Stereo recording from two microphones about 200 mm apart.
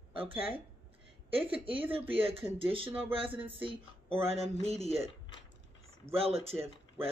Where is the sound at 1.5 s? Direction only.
25° right (ahead or behind).